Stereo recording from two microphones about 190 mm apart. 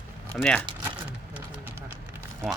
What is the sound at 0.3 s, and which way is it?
Speech, 5° left (ahead or behind).